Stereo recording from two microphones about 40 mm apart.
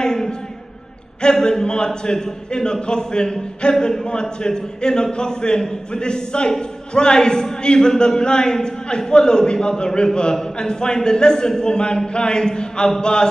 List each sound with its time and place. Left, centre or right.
0.0 s a sound: centre
1.2 s a man's voice: centre
3.7 s a man's voice: centre
4.0 s a man's voice: left